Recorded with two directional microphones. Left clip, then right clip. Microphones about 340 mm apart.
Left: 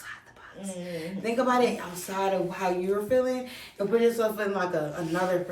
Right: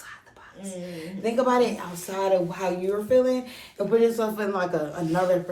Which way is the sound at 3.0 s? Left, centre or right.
Centre.